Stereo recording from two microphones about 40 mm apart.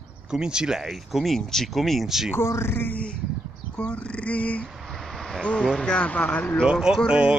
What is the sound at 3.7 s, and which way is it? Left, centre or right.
Speech, left.